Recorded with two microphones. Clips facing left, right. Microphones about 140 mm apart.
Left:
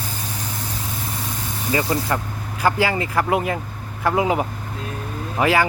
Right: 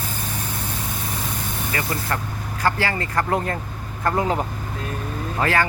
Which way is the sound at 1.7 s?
20° left (ahead or behind).